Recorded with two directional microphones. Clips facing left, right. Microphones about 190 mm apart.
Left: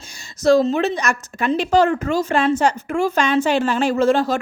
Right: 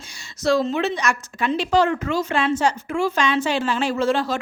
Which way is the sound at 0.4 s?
40° left (ahead or behind).